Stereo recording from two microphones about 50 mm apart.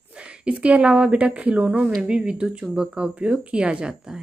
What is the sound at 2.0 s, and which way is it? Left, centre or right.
Speech, centre.